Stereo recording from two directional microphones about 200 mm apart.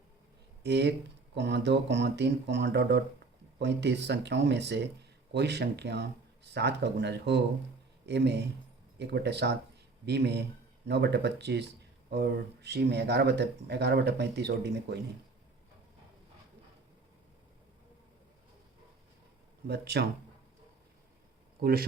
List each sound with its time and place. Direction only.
0.6 s speech: 60° right (ahead or behind)
19.6 s speech: 55° right (ahead or behind)
21.6 s speech: 50° right (ahead or behind)